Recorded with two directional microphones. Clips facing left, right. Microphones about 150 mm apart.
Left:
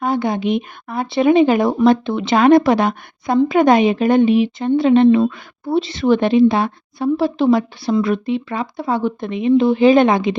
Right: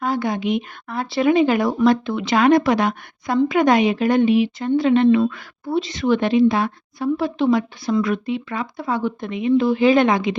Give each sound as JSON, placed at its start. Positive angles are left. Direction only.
{"t": 0.0, "sound": "speech", "side_deg": 25}